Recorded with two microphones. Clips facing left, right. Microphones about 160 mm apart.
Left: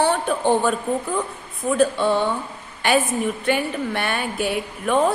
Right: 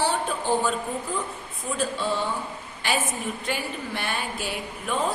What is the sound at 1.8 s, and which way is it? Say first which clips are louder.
A woman's voice: left 8 dB; 60° left (ahead or behind).